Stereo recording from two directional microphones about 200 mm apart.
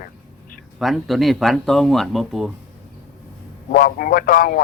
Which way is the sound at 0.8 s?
Centre (ahead or behind).